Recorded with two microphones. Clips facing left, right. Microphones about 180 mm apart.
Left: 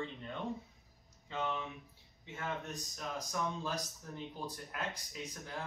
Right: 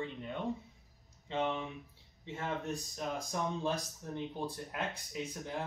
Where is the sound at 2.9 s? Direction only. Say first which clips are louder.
Even; 25° right (ahead or behind).